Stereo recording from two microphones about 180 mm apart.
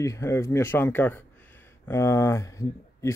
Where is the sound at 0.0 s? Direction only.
15° left (ahead or behind).